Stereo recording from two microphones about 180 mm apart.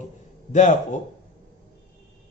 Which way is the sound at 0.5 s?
40° left (ahead or behind).